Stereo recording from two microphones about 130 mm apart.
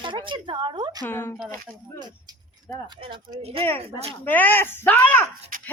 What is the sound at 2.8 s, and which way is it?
Speech, 35° right (ahead or behind).